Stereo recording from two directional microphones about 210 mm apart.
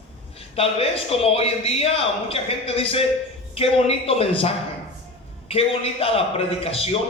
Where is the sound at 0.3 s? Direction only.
25° left (ahead or behind).